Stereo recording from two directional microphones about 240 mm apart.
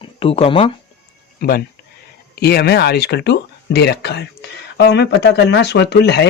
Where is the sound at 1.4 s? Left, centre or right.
Left.